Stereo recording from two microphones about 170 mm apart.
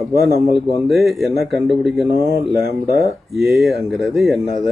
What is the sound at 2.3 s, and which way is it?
Speech, 70° right (ahead or behind).